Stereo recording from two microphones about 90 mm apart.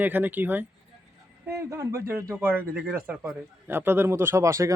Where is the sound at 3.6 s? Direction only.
25° right (ahead or behind).